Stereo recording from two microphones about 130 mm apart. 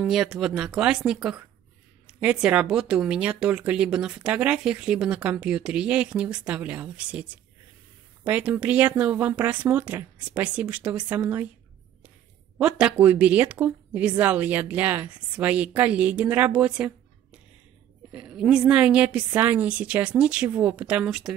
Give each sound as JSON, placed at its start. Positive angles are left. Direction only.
{"t": 0.0, "sound": "speech", "side_deg": 0}
{"t": 12.5, "sound": "speech", "side_deg": -10}